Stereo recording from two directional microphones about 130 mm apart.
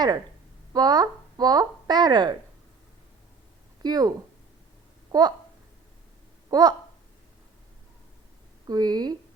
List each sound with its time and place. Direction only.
0.7 s speech: 30° right (ahead or behind)
3.8 s speech: 30° right (ahead or behind)
5.1 s speech: 35° right (ahead or behind)
6.5 s speech: 30° right (ahead or behind)
8.6 s speech: 30° right (ahead or behind)